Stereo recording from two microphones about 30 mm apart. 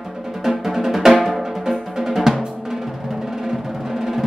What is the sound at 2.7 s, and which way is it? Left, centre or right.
Music, centre.